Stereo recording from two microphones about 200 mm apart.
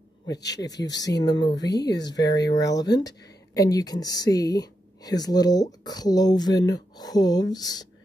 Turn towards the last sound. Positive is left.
turn(degrees=20)  # may be behind; listen again after turning